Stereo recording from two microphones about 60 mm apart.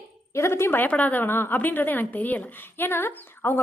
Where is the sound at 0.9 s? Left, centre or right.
Left.